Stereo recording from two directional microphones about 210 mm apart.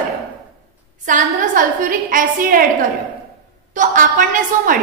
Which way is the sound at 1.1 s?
40° right (ahead or behind).